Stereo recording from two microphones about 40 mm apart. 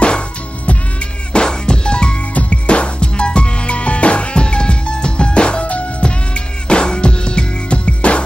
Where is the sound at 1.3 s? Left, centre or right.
Centre.